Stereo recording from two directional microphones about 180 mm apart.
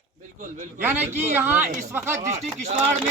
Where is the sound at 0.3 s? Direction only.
45° right (ahead or behind).